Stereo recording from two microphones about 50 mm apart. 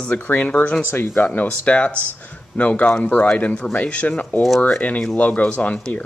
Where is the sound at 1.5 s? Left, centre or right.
Left.